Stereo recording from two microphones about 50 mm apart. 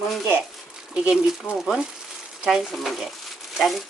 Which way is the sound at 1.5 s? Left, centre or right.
Centre.